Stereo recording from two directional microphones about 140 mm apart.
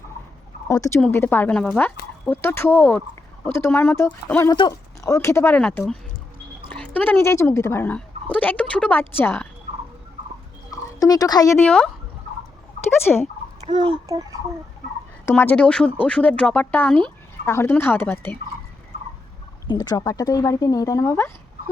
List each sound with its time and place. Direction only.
0.7 s speech: 20° left (ahead or behind)
10.7 s a sound: 25° left (ahead or behind)
11.6 s speech: 5° left (ahead or behind)
13.1 s speech: 5° left (ahead or behind)
13.7 s a child's voice: 55° right (ahead or behind)
14.1 s speech: 25° right (ahead or behind)
15.3 s speech: 15° left (ahead or behind)
19.6 s speech: 30° left (ahead or behind)